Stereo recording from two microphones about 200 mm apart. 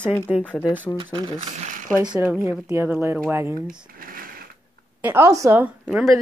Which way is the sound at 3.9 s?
45° right (ahead or behind).